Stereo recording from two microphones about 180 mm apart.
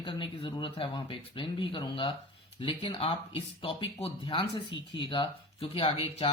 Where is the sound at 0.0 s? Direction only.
25° left (ahead or behind).